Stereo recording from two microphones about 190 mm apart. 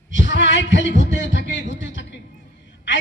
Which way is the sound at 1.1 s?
75° left (ahead or behind).